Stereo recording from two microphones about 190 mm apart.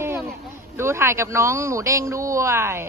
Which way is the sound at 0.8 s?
15° right (ahead or behind).